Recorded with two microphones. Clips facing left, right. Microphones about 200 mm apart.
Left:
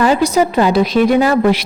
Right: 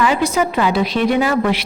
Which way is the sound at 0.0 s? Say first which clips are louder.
Left 4 dB; 40° left (ahead or behind).